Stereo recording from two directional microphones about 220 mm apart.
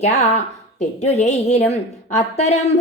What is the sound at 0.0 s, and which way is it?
A woman's voice, 30° left (ahead or behind).